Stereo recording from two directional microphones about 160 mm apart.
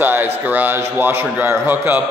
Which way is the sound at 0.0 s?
15° right (ahead or behind).